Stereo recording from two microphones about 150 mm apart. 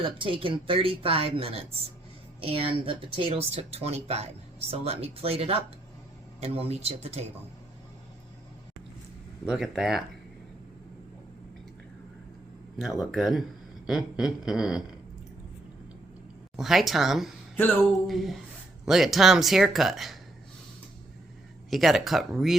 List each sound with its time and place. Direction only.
0.0 s speech: 35° right (ahead or behind)
9.5 s speech: 5° right (ahead or behind)
13.1 s speech: centre (ahead or behind)
16.6 s speech: centre (ahead or behind)
21.7 s speech: centre (ahead or behind)